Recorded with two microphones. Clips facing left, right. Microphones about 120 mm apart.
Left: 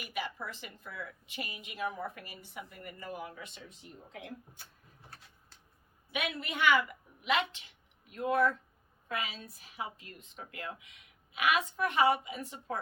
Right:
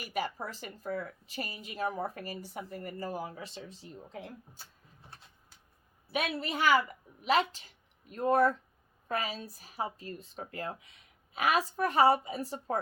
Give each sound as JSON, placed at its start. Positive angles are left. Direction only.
{"t": 0.0, "sound": "speech", "side_deg": -40}
{"t": 6.1, "sound": "speech", "side_deg": -35}